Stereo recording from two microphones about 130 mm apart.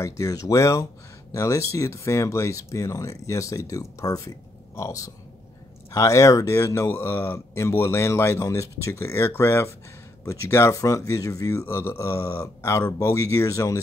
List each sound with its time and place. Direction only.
0.0 s speech: 25° left (ahead or behind)